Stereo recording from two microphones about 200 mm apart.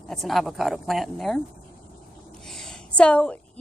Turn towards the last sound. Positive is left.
turn(degrees=5)  # may be behind; listen again after turning